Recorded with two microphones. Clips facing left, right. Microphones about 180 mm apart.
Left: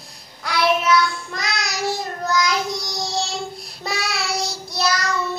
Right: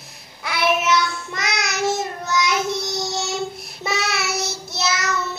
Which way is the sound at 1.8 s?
20° right (ahead or behind).